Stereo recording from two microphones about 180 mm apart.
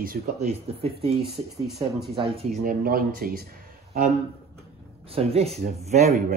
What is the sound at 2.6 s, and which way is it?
Speech, 50° right (ahead or behind).